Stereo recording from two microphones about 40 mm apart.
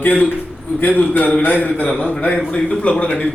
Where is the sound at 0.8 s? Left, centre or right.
Left.